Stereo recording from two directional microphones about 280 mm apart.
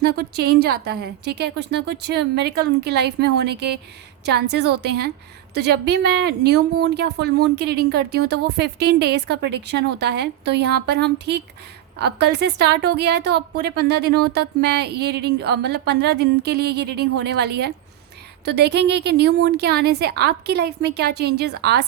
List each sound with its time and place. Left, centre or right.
0.0 s speech: right